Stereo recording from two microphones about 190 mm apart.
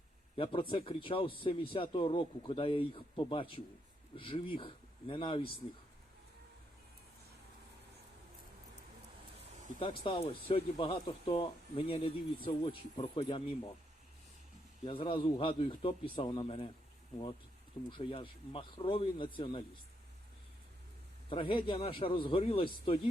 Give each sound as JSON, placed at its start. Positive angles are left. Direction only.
{"t": 0.3, "sound": "a man's voice", "side_deg": 30}
{"t": 9.8, "sound": "a man's voice", "side_deg": 30}
{"t": 14.8, "sound": "a man's voice", "side_deg": 25}
{"t": 17.8, "sound": "a man's voice", "side_deg": 25}
{"t": 21.2, "sound": "a man's voice", "side_deg": 30}